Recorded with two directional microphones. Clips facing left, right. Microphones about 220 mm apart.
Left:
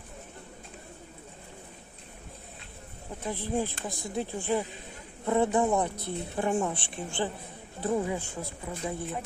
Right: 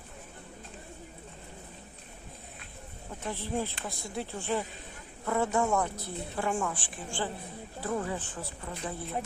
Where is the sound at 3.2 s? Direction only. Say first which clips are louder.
Left 3 dB; 15° left (ahead or behind).